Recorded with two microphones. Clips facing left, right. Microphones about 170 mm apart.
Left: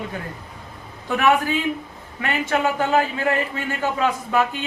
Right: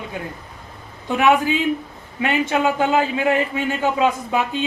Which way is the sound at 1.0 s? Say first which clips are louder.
Right 2 dB; 15° right (ahead or behind).